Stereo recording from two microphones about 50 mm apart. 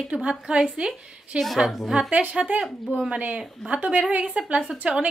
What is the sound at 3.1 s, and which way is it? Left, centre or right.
A woman's voice, right.